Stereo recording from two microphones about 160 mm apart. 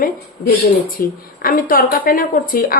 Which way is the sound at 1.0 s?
65° left (ahead or behind).